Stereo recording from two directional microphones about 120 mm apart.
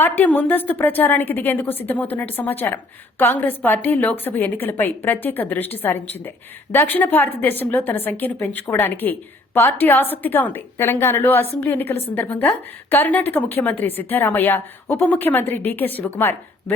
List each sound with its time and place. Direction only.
0.0 s a woman's voice: 15° left (ahead or behind)